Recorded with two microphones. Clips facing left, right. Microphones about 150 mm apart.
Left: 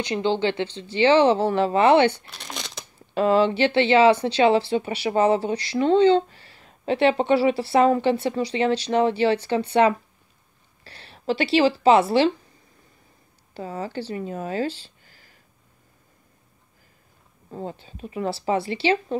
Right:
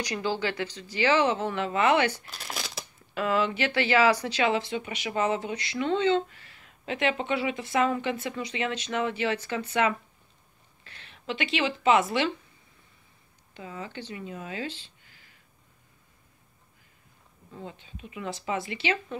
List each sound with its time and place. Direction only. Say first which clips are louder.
0.0 s speech: left 7 dB; 25° left (ahead or behind)
2.3 s shuffling cards: left 1 dB; 5° right (ahead or behind)
3.2 s speech: left 8 dB; 30° left (ahead or behind)
13.5 s speech: left 8 dB; 40° left (ahead or behind)
17.5 s speech: left 8 dB; 40° left (ahead or behind)